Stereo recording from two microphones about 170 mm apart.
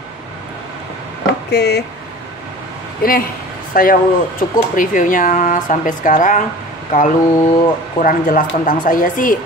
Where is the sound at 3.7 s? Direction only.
55° left (ahead or behind).